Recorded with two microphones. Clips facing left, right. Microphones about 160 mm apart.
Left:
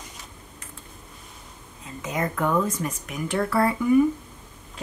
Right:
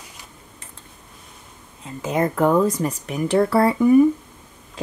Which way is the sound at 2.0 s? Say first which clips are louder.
Right 7 dB; 30° right (ahead or behind).